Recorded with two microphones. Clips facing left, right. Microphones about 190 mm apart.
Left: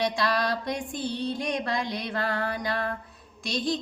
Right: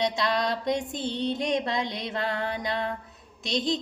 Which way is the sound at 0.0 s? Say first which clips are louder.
Even; 20° right (ahead or behind).